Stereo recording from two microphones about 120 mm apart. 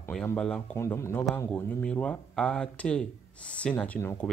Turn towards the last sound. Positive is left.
turn(degrees=15)  # may be behind; listen again after turning